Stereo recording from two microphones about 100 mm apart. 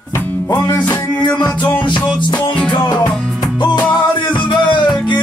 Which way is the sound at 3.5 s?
50° left (ahead or behind).